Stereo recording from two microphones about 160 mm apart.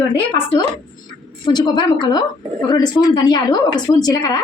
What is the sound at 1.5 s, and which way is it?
A woman's voice, 25° left (ahead or behind).